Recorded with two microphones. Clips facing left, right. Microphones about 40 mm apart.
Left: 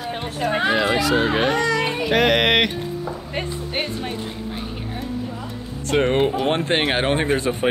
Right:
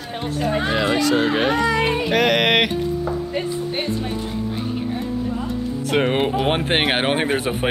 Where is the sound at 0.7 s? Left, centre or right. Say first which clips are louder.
Right 1 dB; centre.